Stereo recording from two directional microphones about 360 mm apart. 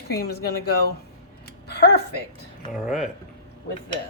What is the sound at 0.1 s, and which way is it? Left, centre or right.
Speech, left.